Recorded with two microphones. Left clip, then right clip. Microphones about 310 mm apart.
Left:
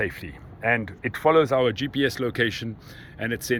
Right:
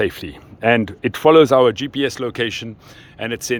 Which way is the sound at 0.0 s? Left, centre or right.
Right.